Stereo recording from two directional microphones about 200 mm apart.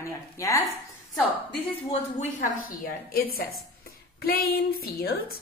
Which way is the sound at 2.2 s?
45° left (ahead or behind).